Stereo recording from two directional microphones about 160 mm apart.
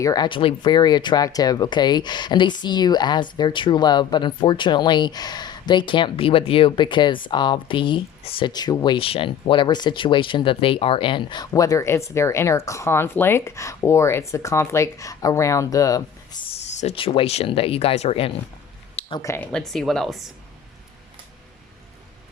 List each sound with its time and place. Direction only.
0.0 s speech: 25° left (ahead or behind)
16.8 s speech: 35° left (ahead or behind)
18.9 s a sound: 35° left (ahead or behind)
19.2 s speech: 15° left (ahead or behind)
19.5 s speech: 5° left (ahead or behind)